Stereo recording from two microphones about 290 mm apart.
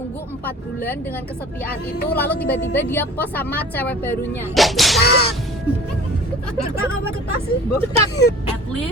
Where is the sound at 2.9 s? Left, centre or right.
Centre.